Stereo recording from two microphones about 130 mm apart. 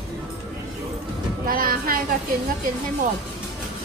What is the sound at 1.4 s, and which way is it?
Train, 90° right.